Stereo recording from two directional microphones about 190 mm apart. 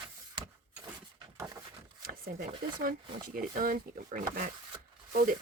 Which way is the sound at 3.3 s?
45° right (ahead or behind).